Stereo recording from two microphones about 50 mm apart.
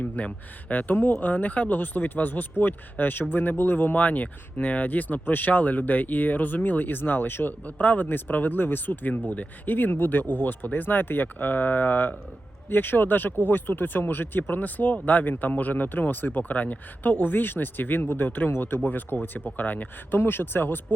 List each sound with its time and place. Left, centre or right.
0.2 s speech: left
9.2 s speech: left